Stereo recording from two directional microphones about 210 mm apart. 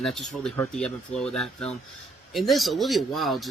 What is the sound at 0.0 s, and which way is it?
Speech, centre (ahead or behind).